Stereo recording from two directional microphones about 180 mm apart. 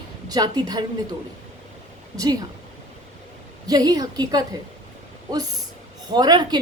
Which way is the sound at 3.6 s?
20° right (ahead or behind).